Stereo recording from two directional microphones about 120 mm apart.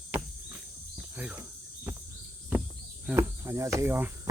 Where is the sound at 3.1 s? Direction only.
25° right (ahead or behind).